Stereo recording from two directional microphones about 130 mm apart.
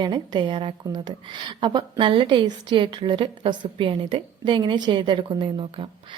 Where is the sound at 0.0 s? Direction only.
35° right (ahead or behind).